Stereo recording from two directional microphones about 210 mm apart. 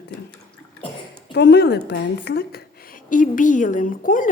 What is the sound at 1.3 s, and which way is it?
A woman's voice, 55° left (ahead or behind).